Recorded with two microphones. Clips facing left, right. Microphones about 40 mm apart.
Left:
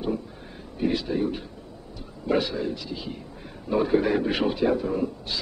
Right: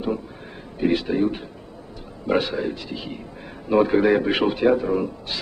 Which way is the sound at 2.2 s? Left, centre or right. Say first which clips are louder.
Right 3 dB; right.